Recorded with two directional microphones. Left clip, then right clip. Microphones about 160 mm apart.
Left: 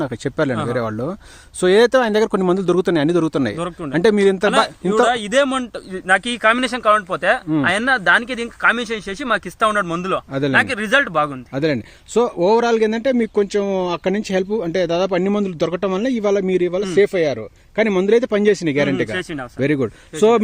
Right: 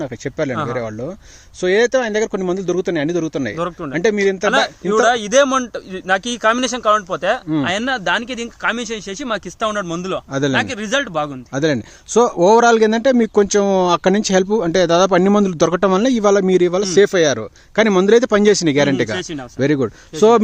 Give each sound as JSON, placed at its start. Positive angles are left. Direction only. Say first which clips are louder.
{"t": 0.0, "sound": "speech", "louder": "left 2 dB", "side_deg": 40}
{"t": 4.5, "sound": "a man's voice", "louder": "right 1 dB", "side_deg": -15}